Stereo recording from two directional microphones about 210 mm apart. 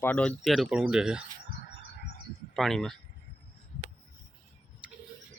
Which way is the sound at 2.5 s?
Centre (ahead or behind).